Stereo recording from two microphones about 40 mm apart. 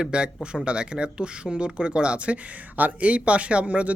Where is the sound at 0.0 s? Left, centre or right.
Right.